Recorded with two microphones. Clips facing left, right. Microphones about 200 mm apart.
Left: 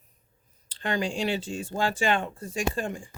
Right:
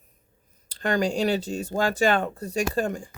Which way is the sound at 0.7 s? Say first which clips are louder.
Right 5 dB; 40° right (ahead or behind).